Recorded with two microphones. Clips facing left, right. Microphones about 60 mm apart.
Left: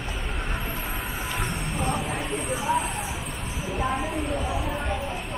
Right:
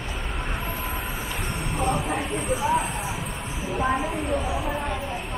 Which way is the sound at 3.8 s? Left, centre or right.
Centre.